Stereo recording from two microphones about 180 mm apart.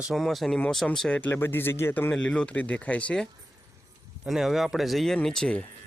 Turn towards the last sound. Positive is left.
turn(degrees=5)  # may be behind; listen again after turning